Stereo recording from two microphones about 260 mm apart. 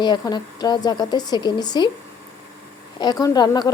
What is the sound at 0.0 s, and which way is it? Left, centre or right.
A woman's voice, centre.